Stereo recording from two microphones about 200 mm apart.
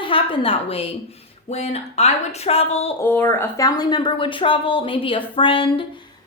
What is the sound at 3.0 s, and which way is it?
A woman's voice, 10° left (ahead or behind).